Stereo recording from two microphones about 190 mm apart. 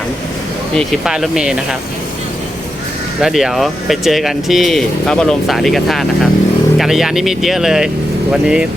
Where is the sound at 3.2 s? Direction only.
Centre (ahead or behind).